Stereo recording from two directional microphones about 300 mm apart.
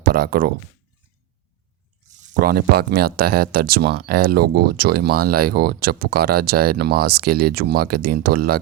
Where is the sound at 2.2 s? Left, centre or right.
Right.